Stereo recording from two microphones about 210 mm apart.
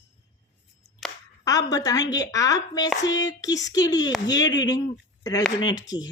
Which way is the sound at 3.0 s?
60° left (ahead or behind).